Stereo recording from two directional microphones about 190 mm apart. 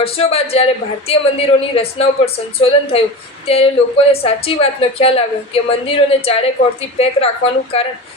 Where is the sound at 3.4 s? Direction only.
30° left (ahead or behind).